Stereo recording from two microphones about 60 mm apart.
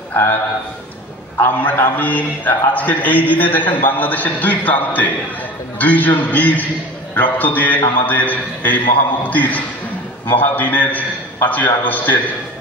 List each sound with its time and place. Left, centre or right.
0.1 s a man's voice: left
1.4 s a man's voice: left